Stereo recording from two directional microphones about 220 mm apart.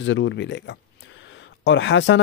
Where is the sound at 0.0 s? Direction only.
60° left (ahead or behind).